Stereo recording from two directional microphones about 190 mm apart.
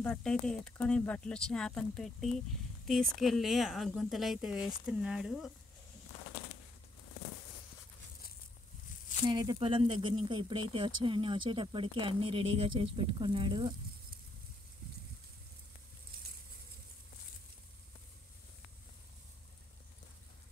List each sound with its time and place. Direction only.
0.0 s speech: 5° left (ahead or behind)
9.2 s speech: 20° right (ahead or behind)